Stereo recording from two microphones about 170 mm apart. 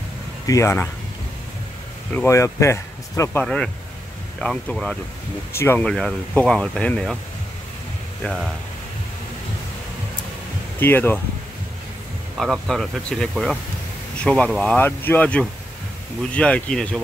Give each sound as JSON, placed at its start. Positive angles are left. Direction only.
{"t": 0.5, "sound": "speech", "side_deg": 15}
{"t": 2.1, "sound": "speech", "side_deg": 15}
{"t": 3.4, "sound": "speech", "side_deg": 5}
{"t": 8.2, "sound": "speech", "side_deg": 5}
{"t": 10.8, "sound": "speech", "side_deg": 10}
{"t": 12.4, "sound": "speech", "side_deg": 0}